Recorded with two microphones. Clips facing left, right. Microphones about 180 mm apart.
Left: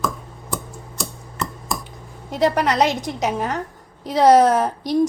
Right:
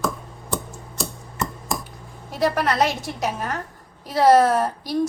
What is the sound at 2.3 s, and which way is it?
A woman's voice, 20° left (ahead or behind).